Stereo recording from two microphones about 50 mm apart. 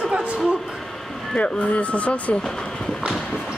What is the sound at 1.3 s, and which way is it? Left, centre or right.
Speech, left.